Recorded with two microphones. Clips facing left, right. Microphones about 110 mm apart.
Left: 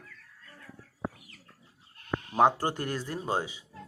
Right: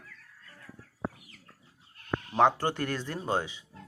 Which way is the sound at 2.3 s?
15° left (ahead or behind).